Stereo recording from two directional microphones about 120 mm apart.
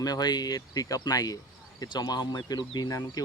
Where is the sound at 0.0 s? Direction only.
35° left (ahead or behind).